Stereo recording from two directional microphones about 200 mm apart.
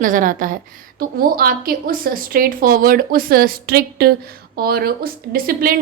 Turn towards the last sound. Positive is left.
turn(degrees=-45)  # may be behind; listen again after turning